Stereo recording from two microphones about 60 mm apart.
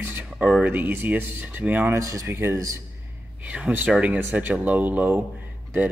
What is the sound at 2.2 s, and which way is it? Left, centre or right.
Speech, right.